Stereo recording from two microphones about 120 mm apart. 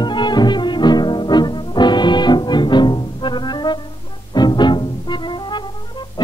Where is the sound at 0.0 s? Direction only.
40° left (ahead or behind).